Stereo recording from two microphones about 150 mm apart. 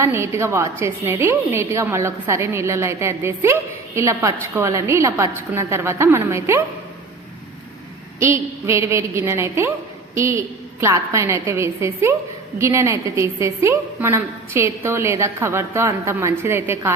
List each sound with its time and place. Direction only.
0.0 s a woman's voice: 20° right (ahead or behind)
8.2 s a woman's voice: 20° right (ahead or behind)